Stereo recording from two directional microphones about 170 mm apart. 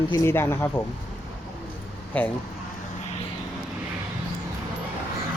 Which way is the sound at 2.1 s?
10° left (ahead or behind).